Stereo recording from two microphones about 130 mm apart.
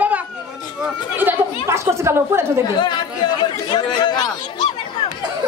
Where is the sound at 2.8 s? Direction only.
35° left (ahead or behind).